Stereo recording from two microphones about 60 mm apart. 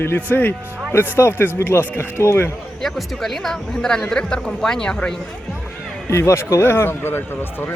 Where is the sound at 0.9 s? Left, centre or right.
Left.